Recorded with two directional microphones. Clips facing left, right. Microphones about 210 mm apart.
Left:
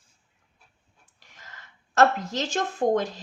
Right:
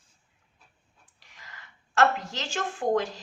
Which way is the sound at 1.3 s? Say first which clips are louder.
Left 1 dB; 45° left (ahead or behind).